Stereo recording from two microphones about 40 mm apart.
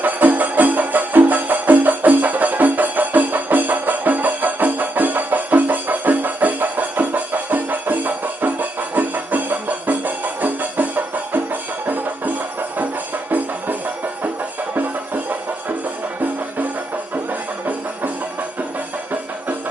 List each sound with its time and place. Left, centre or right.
0.0 s music: right
14.8 s music: right